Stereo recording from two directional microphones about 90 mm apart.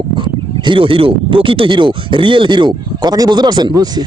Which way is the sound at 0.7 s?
75° right (ahead or behind).